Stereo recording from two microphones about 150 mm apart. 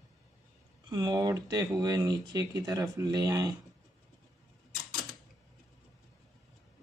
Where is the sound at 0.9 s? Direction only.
30° right (ahead or behind).